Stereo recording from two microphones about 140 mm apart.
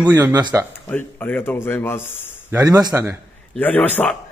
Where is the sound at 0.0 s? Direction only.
15° right (ahead or behind).